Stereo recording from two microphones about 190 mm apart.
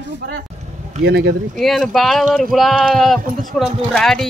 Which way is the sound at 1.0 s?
60° right (ahead or behind).